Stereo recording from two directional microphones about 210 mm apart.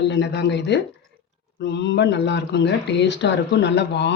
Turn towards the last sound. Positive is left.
turn(degrees=55)  # may be behind; listen again after turning